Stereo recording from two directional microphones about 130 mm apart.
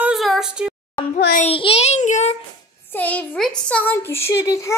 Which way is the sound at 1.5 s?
45° left (ahead or behind).